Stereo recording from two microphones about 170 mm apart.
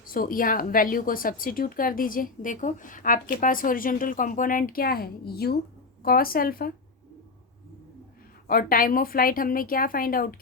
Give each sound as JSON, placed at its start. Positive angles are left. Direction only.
{"t": 0.0, "sound": "speech", "side_deg": 55}
{"t": 8.4, "sound": "speech", "side_deg": 60}